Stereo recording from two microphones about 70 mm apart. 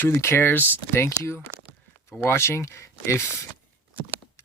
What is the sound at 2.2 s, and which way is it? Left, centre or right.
Speech, left.